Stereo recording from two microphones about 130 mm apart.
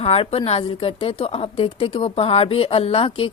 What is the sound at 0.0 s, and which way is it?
A woman's voice, 50° left (ahead or behind).